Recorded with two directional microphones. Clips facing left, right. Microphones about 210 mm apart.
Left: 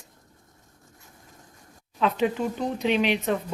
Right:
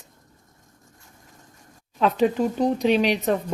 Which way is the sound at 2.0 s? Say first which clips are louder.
Right 4 dB; 40° right (ahead or behind).